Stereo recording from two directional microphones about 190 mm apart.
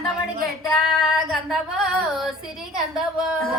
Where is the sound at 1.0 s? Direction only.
Centre (ahead or behind).